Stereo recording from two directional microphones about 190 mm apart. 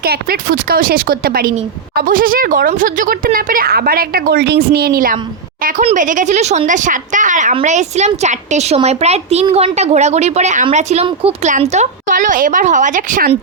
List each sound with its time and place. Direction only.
0.0 s a woman's voice: 55° right (ahead or behind)